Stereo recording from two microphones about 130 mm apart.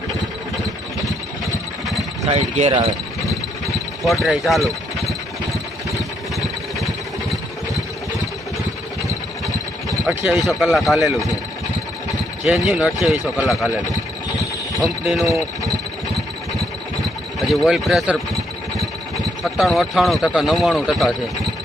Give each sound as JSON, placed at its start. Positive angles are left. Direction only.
{"t": 2.3, "sound": "speech", "side_deg": -55}
{"t": 4.0, "sound": "a sound", "side_deg": 0}
{"t": 10.3, "sound": "speech", "side_deg": 0}
{"t": 12.4, "sound": "speech", "side_deg": 0}
{"t": 14.3, "sound": "a sound", "side_deg": 0}
{"t": 17.4, "sound": "speech", "side_deg": 0}
{"t": 19.4, "sound": "speech", "side_deg": 0}